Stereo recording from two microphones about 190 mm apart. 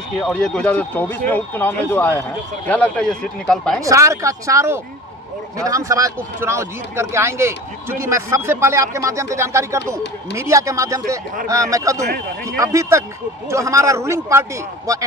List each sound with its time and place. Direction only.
0.2 s speech: 5° left (ahead or behind)
3.8 s speech: 15° right (ahead or behind)